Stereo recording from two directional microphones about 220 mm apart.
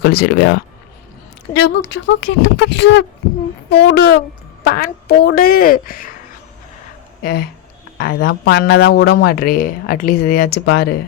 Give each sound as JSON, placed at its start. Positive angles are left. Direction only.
{"t": 0.0, "sound": "speech", "side_deg": 45}
{"t": 7.2, "sound": "speech", "side_deg": 45}